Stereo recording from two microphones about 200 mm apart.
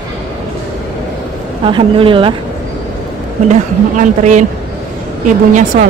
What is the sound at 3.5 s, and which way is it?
Speech, 40° right (ahead or behind).